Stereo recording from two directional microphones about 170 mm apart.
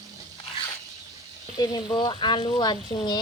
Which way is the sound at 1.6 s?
25° left (ahead or behind).